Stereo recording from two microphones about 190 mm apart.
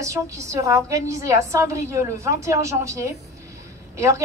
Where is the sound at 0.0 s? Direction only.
15° right (ahead or behind).